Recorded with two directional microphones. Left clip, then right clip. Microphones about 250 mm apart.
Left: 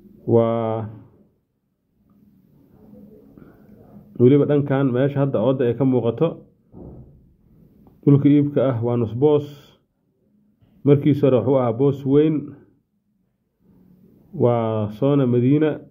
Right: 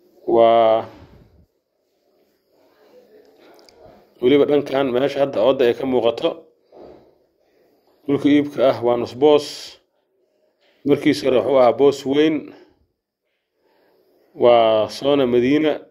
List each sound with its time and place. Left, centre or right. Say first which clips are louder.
0.3 s speech: right 6 dB; right
4.2 s speech: right 1 dB; centre
8.1 s speech: left 1 dB; right
10.9 s speech: even; right
14.4 s speech: right 7 dB; right